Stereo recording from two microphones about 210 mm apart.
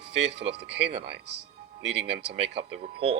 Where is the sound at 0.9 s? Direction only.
30° right (ahead or behind).